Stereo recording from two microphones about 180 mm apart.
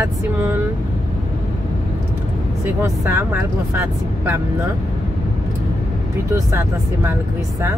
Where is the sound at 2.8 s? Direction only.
10° right (ahead or behind).